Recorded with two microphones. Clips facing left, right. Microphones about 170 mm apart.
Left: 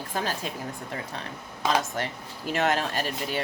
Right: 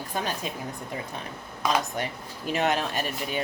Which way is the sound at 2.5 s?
20° right (ahead or behind).